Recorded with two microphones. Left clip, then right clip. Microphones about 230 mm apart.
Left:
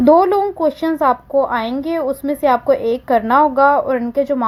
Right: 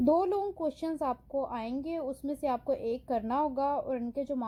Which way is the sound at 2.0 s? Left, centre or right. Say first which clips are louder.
Left 19 dB; left.